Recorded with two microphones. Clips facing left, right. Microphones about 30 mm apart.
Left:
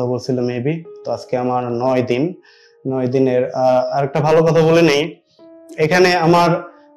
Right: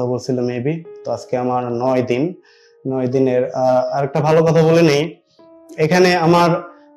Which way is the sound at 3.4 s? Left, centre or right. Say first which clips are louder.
Left 1 dB; left.